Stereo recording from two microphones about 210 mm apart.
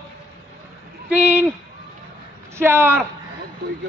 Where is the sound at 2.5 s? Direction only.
10° right (ahead or behind).